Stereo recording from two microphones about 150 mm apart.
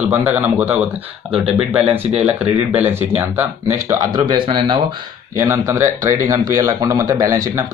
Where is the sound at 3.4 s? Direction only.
15° right (ahead or behind).